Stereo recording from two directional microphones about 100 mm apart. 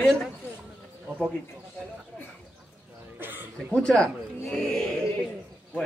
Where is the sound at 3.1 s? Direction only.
20° right (ahead or behind).